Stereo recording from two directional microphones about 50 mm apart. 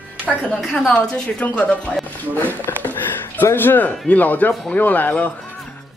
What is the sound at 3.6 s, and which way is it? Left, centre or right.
Speech, left.